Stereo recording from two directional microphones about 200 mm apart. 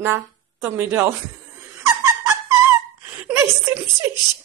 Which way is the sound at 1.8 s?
15° right (ahead or behind).